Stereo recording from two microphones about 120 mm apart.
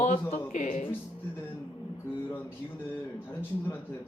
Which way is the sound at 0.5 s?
90° left.